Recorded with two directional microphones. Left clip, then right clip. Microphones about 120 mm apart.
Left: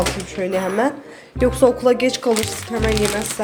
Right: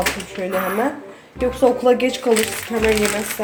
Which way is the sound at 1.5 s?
65° left (ahead or behind).